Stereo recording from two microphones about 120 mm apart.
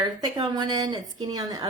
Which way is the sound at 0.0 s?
30° right (ahead or behind).